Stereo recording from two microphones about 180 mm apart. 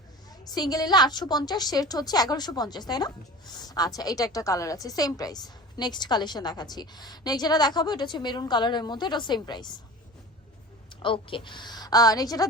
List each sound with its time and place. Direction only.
0.5 s a woman's voice: 20° left (ahead or behind)
11.0 s a woman's voice: 30° left (ahead or behind)